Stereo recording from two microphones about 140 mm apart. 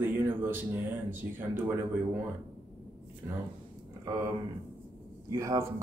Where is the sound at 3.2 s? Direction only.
15° right (ahead or behind).